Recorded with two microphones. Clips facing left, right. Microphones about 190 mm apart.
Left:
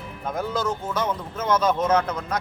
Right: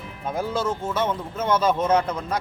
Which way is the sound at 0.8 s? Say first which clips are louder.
Right 1 dB; 25° right (ahead or behind).